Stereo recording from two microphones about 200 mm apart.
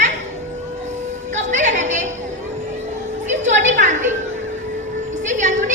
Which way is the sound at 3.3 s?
35° right (ahead or behind).